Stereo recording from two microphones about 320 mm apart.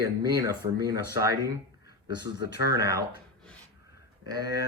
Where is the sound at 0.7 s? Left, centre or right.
Centre.